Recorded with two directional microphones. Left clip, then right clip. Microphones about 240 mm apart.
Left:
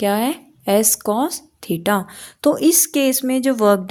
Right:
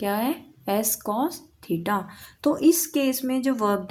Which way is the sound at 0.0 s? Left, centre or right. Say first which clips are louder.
Left 7 dB; left.